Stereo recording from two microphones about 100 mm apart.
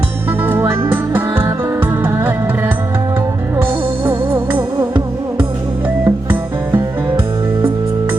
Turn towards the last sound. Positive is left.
turn(degrees=-20)  # may be behind; listen again after turning